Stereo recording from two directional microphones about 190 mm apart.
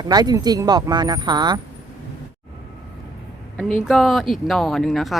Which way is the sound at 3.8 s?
Centre (ahead or behind).